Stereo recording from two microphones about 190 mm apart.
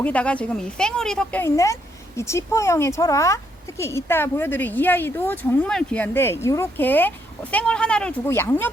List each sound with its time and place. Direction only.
0.0 s speech: 5° left (ahead or behind)